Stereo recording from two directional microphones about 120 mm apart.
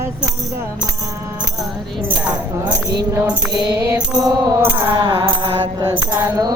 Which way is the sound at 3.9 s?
30° right (ahead or behind).